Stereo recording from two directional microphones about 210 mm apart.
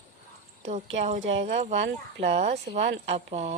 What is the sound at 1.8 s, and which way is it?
Speech, 55° right (ahead or behind).